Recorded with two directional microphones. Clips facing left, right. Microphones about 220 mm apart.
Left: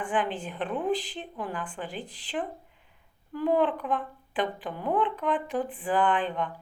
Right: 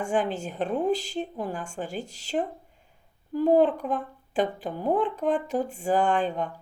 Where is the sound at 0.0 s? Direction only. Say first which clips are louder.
Right 3 dB; 45° right (ahead or behind).